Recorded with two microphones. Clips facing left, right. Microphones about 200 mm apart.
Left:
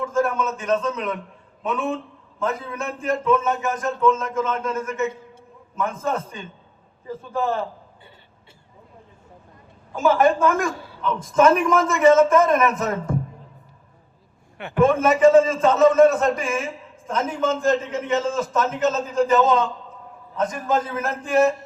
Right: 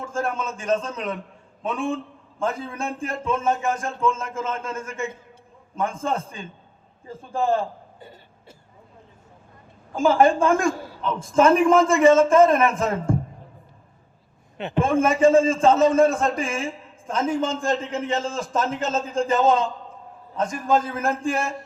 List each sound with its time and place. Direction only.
0.0 s a man's voice: 30° right (ahead or behind)
7.9 s a sound: 40° right (ahead or behind)
9.9 s a man's voice: 30° right (ahead or behind)
14.6 s a man's voice: 25° right (ahead or behind)